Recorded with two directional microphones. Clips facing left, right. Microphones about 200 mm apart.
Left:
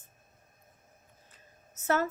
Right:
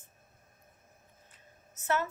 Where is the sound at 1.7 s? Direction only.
40° left (ahead or behind).